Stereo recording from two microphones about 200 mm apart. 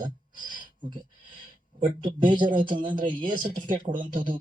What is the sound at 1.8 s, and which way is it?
Speech, 25° right (ahead or behind).